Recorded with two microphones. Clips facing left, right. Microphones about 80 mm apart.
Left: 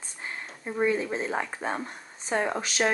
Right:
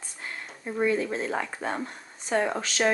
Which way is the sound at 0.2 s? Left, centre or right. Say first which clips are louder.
Left 1 dB; centre.